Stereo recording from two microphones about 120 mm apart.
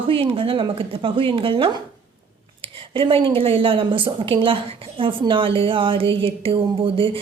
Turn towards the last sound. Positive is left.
turn(degrees=-45)  # may be behind; listen again after turning